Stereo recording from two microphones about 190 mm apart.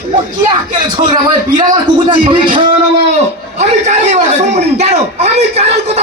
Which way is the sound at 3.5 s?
40° right (ahead or behind).